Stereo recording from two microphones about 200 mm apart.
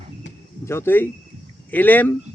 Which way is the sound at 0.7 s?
10° left (ahead or behind).